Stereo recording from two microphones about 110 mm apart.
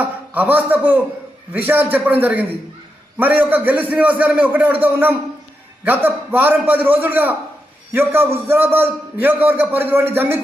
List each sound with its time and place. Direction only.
0.0 s a man's voice: 15° right (ahead or behind)